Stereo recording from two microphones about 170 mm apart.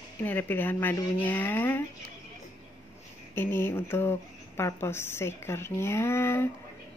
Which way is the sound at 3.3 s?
15° left (ahead or behind).